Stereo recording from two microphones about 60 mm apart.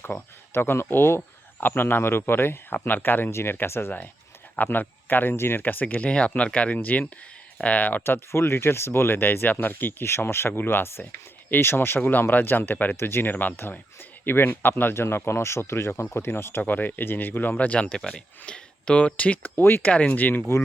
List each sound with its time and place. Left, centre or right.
0.0 s speech: left
6.1 s speech: centre
8.0 s speech: left
10.0 s speech: left
13.0 s speech: left
17.6 s speech: left
19.9 s speech: left